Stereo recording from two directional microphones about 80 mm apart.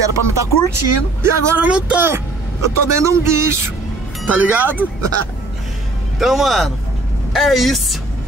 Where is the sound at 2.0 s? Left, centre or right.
Right.